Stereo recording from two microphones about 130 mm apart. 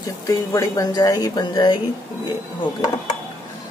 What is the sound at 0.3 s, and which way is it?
A woman's voice, 25° left (ahead or behind).